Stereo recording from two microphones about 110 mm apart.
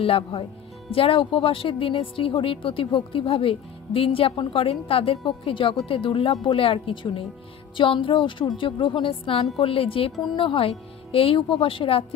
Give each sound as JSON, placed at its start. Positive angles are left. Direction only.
{"t": 0.0, "sound": "a woman's voice", "side_deg": 55}